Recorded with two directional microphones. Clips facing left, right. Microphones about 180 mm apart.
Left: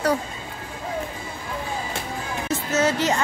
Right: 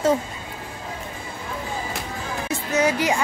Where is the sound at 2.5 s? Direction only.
10° right (ahead or behind).